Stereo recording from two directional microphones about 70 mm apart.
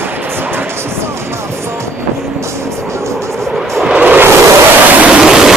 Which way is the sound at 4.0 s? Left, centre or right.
Right.